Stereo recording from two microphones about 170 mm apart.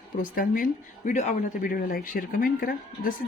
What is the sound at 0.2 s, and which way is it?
Speech, 55° left (ahead or behind).